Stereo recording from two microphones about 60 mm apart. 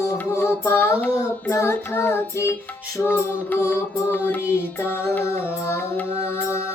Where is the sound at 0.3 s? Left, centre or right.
Left.